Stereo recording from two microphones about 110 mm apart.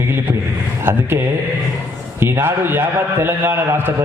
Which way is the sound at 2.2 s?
20° right (ahead or behind).